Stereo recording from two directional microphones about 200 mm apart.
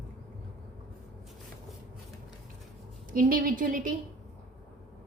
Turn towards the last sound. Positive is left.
turn(degrees=-45)  # may be behind; listen again after turning